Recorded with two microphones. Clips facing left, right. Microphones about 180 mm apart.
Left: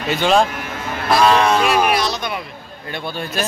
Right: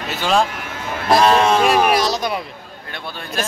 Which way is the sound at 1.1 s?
25° right (ahead or behind).